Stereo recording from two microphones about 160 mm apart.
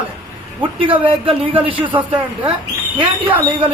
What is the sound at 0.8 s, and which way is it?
Speech, 30° right (ahead or behind).